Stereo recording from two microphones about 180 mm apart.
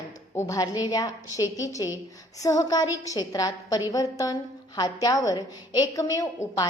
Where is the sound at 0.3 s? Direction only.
20° left (ahead or behind).